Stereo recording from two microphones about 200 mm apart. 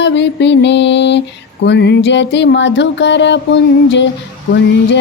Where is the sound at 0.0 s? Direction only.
60° left (ahead or behind).